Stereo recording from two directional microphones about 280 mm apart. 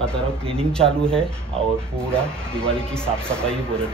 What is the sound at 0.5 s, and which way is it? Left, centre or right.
Speech, centre.